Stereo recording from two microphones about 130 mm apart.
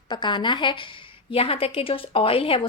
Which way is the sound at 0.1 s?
35° left (ahead or behind).